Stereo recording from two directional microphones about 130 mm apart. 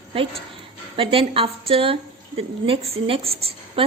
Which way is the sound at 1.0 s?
45° right (ahead or behind).